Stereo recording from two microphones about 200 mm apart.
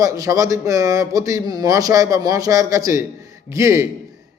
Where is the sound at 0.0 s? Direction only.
15° right (ahead or behind).